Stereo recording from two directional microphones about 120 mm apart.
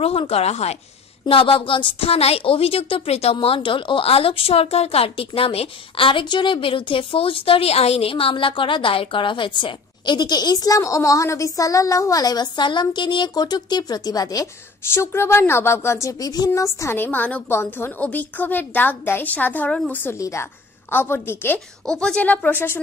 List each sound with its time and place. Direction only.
0.0 s speech: 55° left (ahead or behind)
1.2 s a woman's voice: 45° left (ahead or behind); by 14.5 s 30° left (ahead or behind)
14.9 s a woman's voice: 20° left (ahead or behind)
20.2 s a woman's voice: 25° left (ahead or behind)
21.8 s speech: 5° left (ahead or behind)